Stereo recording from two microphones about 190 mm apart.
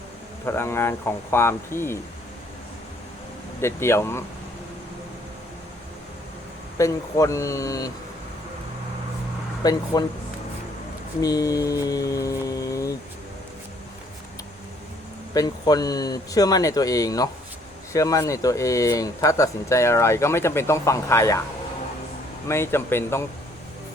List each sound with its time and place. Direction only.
0.4 s speech: 15° left (ahead or behind)
3.6 s speech: 15° left (ahead or behind)
6.7 s speech: 15° left (ahead or behind)
9.6 s speech: 20° left (ahead or behind)
11.2 s speech: 20° left (ahead or behind)
15.3 s speech: 20° left (ahead or behind)
22.4 s speech: 15° left (ahead or behind)